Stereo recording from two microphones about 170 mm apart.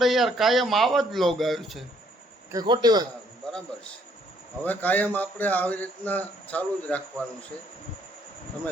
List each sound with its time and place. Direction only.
0.0 s speech: centre (ahead or behind)
2.5 s a man's voice: 25° right (ahead or behind)
4.6 s speech: 10° left (ahead or behind)